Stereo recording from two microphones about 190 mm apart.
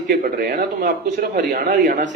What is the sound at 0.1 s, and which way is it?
A man's voice, 55° right (ahead or behind).